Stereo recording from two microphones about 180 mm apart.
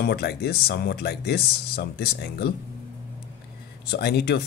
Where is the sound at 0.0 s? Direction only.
65° left (ahead or behind).